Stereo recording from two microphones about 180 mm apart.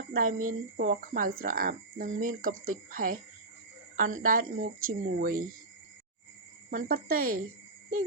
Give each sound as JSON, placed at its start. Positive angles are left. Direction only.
{"t": 0.1, "sound": "speech", "side_deg": -50}
{"t": 6.7, "sound": "speech", "side_deg": -50}